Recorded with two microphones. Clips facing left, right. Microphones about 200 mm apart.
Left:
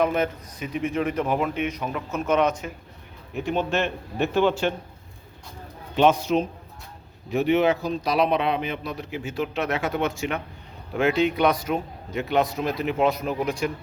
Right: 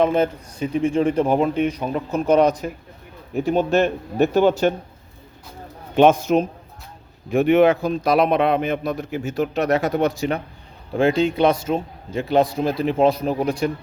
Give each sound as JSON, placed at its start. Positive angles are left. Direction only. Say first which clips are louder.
{"t": 0.0, "sound": "speech", "louder": "right 5 dB", "side_deg": -30}
{"t": 6.0, "sound": "a man's voice", "louder": "right 5 dB", "side_deg": -50}